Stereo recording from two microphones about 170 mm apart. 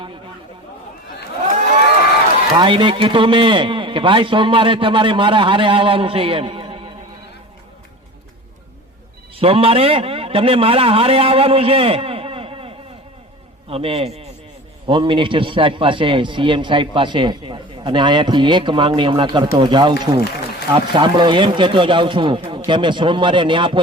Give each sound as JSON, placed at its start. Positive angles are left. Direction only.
{"t": 2.6, "sound": "a man's voice", "side_deg": -30}
{"t": 9.3, "sound": "a man's voice", "side_deg": -35}